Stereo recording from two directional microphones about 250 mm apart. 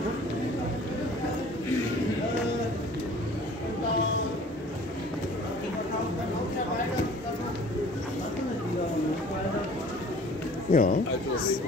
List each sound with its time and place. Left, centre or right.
10.7 s speech: left